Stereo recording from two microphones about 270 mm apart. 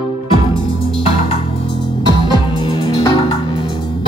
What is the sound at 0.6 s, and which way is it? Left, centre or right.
Music, centre.